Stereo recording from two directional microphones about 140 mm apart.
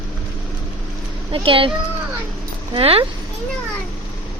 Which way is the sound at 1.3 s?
40° right (ahead or behind).